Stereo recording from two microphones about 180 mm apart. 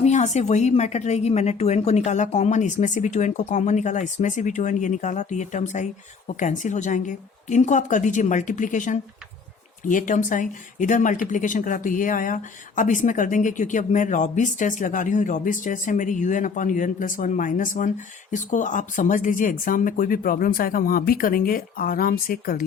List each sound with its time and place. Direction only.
0.0 s speech: 40° left (ahead or behind)